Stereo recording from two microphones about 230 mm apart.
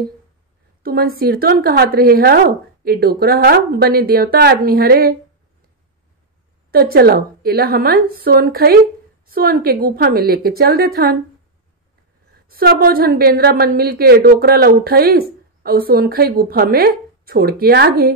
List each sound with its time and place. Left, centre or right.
0.8 s a woman's voice: right
6.7 s a woman's voice: right
12.4 s a woman's voice: right